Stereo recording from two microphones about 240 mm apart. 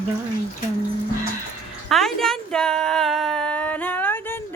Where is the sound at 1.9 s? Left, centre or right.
Centre.